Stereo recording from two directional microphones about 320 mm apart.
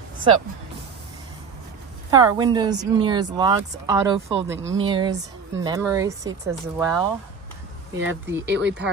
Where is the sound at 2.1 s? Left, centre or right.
Centre.